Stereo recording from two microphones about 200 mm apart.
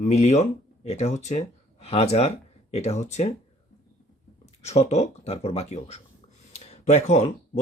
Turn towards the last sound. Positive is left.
turn(degrees=35)  # may be behind; listen again after turning